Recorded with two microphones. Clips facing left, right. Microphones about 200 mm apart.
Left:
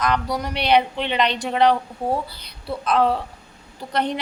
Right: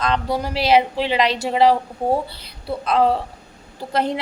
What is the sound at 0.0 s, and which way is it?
Speech, 30° right (ahead or behind).